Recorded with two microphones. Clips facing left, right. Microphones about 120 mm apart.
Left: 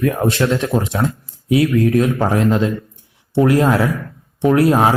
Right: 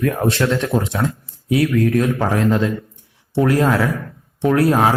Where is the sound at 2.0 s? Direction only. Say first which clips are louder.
Left 2 dB; 15° left (ahead or behind).